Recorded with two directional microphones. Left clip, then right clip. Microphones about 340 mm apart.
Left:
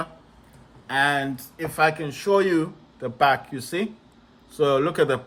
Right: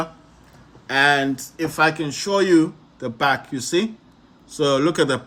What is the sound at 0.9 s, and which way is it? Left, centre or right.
Speech, centre.